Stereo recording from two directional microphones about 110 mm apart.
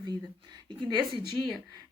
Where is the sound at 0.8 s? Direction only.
40° right (ahead or behind).